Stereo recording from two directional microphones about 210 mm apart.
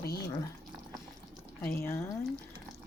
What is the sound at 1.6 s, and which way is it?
Speech, 10° left (ahead or behind).